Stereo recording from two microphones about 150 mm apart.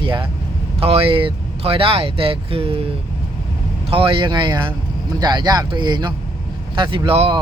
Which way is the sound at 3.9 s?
35° right (ahead or behind).